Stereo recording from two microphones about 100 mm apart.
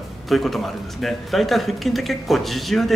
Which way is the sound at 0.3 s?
Centre (ahead or behind).